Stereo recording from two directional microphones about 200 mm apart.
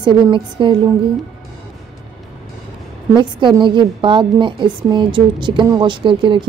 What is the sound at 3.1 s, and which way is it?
A woman's voice, 25° right (ahead or behind).